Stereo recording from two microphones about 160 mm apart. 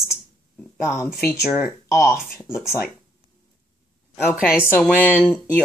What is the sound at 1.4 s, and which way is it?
Speech, 5° right (ahead or behind).